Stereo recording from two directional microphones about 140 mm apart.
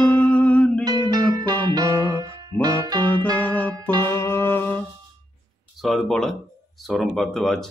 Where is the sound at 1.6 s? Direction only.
30° right (ahead or behind).